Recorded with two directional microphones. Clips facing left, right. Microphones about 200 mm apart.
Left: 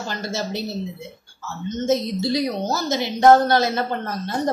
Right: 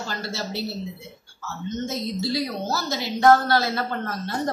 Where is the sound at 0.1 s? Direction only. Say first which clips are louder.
Left 6 dB; 20° left (ahead or behind).